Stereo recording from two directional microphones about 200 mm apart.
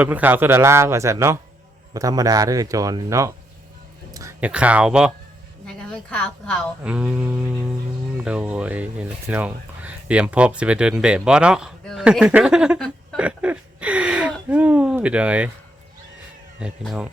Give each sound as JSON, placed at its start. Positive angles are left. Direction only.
{"t": 0.0, "sound": "a woman's voice", "side_deg": -10}
{"t": 6.8, "sound": "speech", "side_deg": -5}
{"t": 16.6, "sound": "speech", "side_deg": -5}